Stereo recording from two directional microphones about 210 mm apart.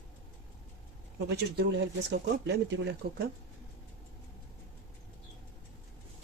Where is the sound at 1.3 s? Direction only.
55° right (ahead or behind).